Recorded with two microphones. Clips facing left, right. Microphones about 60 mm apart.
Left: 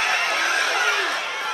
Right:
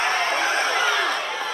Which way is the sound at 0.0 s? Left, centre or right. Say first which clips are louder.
Even; right.